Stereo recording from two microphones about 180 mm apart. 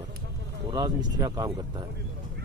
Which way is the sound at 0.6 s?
25° right (ahead or behind).